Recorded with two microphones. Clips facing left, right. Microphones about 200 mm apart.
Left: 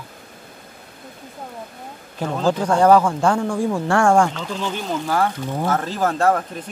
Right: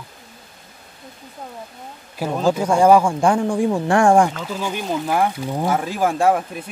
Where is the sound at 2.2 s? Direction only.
10° right (ahead or behind).